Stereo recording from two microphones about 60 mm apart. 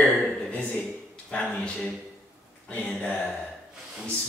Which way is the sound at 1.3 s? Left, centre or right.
Centre.